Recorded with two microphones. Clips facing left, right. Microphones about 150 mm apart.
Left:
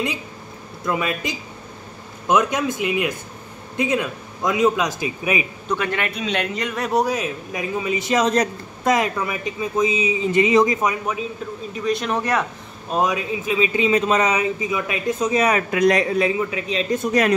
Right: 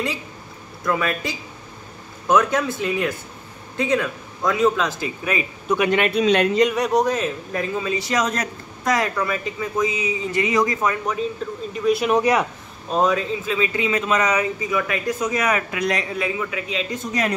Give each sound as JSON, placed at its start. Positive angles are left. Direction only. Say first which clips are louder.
{"t": 0.8, "sound": "a man's voice", "louder": "right 1 dB", "side_deg": 20}
{"t": 5.7, "sound": "a man's voice", "louder": "right 6 dB", "side_deg": -15}
{"t": 6.2, "sound": "speech", "louder": "right 7 dB", "side_deg": -40}
{"t": 6.7, "sound": "a man's voice", "louder": "right 1 dB", "side_deg": 5}
{"t": 11.7, "sound": "speech", "louder": "right 4 dB", "side_deg": -5}
{"t": 12.9, "sound": "a man's voice", "louder": "right 1 dB", "side_deg": 10}
{"t": 13.9, "sound": "a man's voice", "louder": "even", "side_deg": 30}
{"t": 15.7, "sound": "speech", "louder": "left 7 dB", "side_deg": 40}